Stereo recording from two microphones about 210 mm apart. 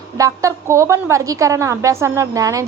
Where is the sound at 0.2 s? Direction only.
15° right (ahead or behind).